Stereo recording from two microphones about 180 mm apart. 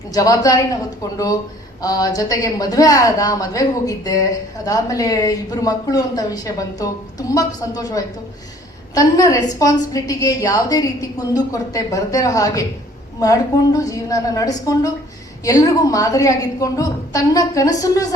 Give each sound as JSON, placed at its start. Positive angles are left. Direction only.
{"t": 0.1, "sound": "a woman's voice", "side_deg": 20}
{"t": 1.8, "sound": "a woman's voice", "side_deg": 20}